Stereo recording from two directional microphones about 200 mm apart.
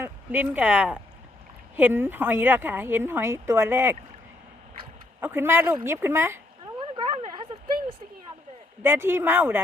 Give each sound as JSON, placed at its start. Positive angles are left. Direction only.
{"t": 0.0, "sound": "speech", "side_deg": -10}
{"t": 5.2, "sound": "speech", "side_deg": -10}
{"t": 6.7, "sound": "a sound", "side_deg": -25}
{"t": 8.8, "sound": "speech", "side_deg": -10}